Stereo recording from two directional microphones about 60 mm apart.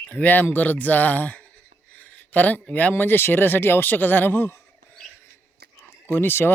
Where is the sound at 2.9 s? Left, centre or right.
Left.